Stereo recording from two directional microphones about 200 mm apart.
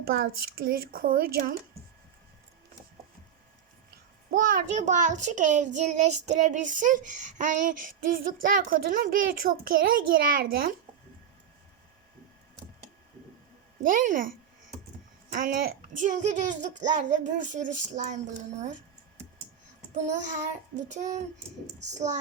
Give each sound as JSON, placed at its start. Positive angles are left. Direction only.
{"t": 0.0, "sound": "speech", "side_deg": -50}
{"t": 4.3, "sound": "child singing", "side_deg": -45}
{"t": 13.8, "sound": "speech", "side_deg": -40}
{"t": 15.3, "sound": "child singing", "side_deg": -45}